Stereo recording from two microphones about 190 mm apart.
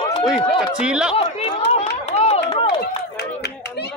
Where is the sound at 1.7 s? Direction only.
35° left (ahead or behind).